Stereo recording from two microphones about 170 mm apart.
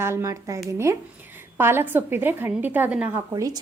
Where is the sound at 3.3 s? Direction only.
25° right (ahead or behind).